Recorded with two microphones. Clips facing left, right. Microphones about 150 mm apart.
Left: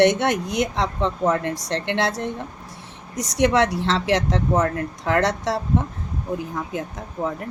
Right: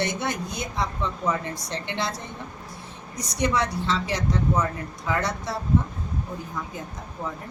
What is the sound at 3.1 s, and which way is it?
A woman's voice, 90° left.